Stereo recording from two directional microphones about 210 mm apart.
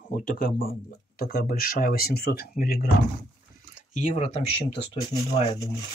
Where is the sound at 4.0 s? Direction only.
35° left (ahead or behind); by 5.7 s 20° left (ahead or behind).